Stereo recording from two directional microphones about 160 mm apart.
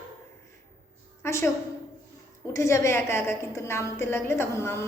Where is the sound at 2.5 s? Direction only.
20° left (ahead or behind).